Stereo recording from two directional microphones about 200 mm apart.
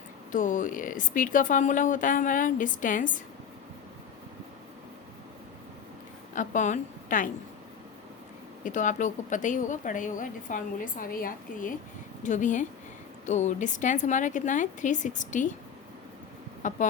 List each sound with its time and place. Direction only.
0.3 s a woman's voice: 40° left (ahead or behind)
6.3 s a woman's voice: 40° left (ahead or behind)
8.6 s a woman's voice: 40° left (ahead or behind)
16.6 s a woman's voice: 40° left (ahead or behind)